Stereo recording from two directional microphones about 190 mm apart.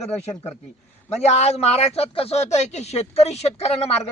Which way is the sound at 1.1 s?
35° left (ahead or behind).